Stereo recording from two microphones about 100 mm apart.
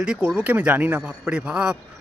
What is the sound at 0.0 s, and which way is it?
A man's voice, 10° right (ahead or behind).